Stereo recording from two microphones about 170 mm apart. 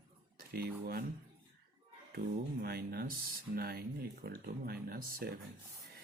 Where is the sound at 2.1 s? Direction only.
65° right (ahead or behind).